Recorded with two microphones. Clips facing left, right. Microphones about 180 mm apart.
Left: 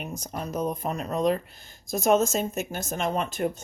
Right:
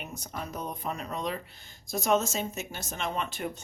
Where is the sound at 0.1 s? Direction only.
40° left (ahead or behind).